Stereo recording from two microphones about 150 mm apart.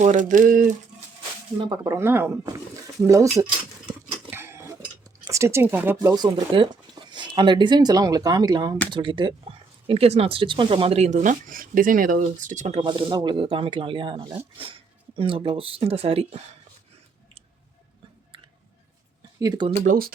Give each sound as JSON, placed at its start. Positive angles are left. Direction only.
{"t": 0.0, "sound": "a sound", "side_deg": -60}
{"t": 1.5, "sound": "speech", "side_deg": -30}
{"t": 2.0, "sound": "speech", "side_deg": -15}
{"t": 4.3, "sound": "cutlery", "side_deg": -15}
{"t": 5.2, "sound": "speech", "side_deg": -20}
{"t": 12.8, "sound": "speech", "side_deg": -30}
{"t": 19.4, "sound": "speech", "side_deg": -30}
{"t": 19.7, "sound": "a sound", "side_deg": -60}